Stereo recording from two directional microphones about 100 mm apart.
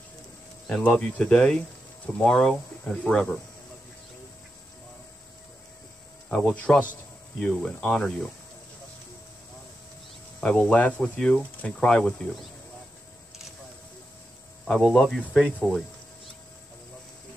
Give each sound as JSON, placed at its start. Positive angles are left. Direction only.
{"t": 0.9, "sound": "speech", "side_deg": 10}
{"t": 6.2, "sound": "speech", "side_deg": 5}
{"t": 10.4, "sound": "speech", "side_deg": 10}
{"t": 14.8, "sound": "speech", "side_deg": -5}